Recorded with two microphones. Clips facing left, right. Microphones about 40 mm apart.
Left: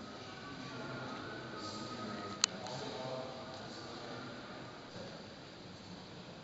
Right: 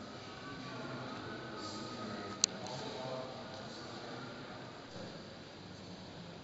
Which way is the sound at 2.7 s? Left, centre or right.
Centre.